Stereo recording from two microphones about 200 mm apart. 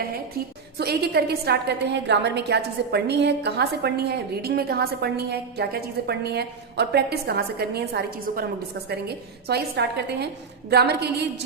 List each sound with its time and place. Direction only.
0.8 s a woman's voice: 55° right (ahead or behind)